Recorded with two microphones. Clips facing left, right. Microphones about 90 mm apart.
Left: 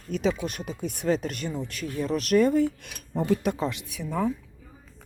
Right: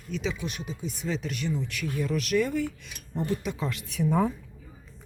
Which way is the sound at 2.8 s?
60° left (ahead or behind).